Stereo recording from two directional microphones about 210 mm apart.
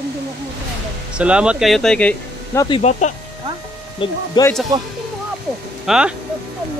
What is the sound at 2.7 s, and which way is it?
Speech, 30° left (ahead or behind).